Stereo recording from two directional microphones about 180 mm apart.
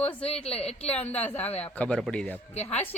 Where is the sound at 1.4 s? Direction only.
35° left (ahead or behind).